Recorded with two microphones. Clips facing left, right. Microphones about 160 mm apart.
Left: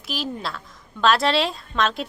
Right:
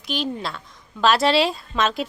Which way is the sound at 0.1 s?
Centre (ahead or behind).